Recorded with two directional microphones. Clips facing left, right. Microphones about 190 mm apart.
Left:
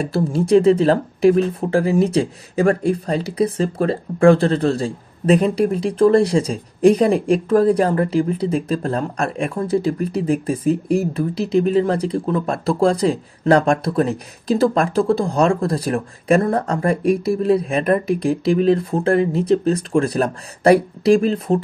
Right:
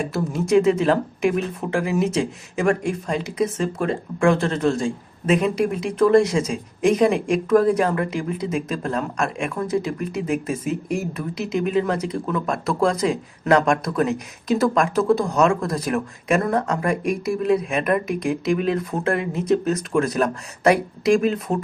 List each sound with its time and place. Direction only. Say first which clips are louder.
0.0 s speech: left 4 dB; 30° left (ahead or behind)